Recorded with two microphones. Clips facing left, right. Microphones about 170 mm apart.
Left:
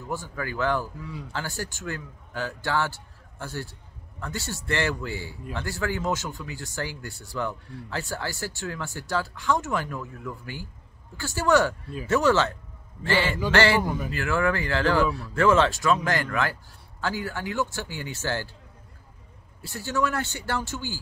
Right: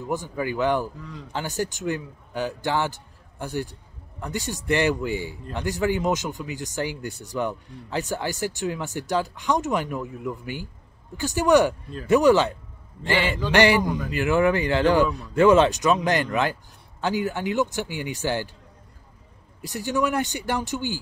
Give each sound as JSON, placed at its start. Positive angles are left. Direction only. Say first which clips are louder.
{"t": 0.0, "sound": "speech", "louder": "right 5 dB", "side_deg": -15}
{"t": 19.6, "sound": "speech", "louder": "right 3 dB", "side_deg": -15}